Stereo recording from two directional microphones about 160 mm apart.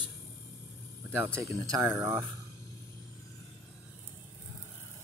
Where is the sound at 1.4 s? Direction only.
20° right (ahead or behind).